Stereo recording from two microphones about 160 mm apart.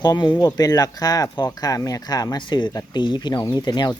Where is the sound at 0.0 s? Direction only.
25° left (ahead or behind).